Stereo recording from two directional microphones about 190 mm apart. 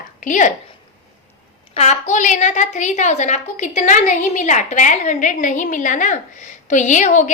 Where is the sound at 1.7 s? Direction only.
35° left (ahead or behind).